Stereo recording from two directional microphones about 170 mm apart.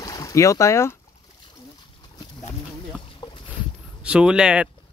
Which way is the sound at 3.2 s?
30° left (ahead or behind).